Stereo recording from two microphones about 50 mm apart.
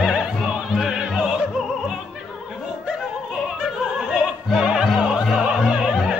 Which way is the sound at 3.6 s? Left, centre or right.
Centre.